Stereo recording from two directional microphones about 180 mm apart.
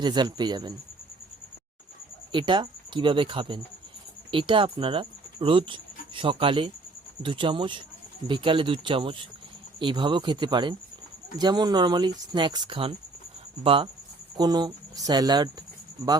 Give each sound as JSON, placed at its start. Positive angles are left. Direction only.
{"t": 0.0, "sound": "speech", "side_deg": -25}
{"t": 2.3, "sound": "speech", "side_deg": -25}